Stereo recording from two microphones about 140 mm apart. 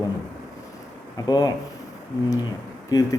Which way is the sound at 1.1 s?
25° left (ahead or behind).